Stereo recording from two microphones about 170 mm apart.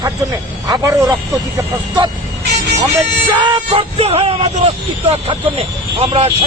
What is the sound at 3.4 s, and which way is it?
Speech, 35° right (ahead or behind).